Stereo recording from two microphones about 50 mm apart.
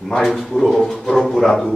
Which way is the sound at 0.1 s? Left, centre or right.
Centre.